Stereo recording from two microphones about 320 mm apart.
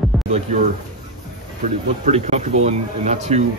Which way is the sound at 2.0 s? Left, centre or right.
Centre.